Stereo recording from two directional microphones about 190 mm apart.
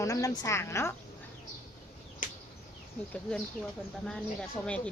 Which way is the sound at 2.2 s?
45° left (ahead or behind).